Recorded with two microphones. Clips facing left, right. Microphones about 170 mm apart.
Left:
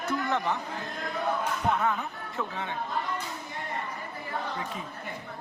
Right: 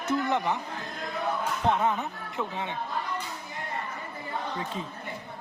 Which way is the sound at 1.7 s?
20° right (ahead or behind).